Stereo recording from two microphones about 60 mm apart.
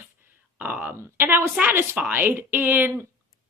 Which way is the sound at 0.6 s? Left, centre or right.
Right.